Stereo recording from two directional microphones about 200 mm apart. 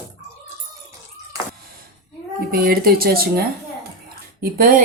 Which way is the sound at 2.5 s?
50° right (ahead or behind).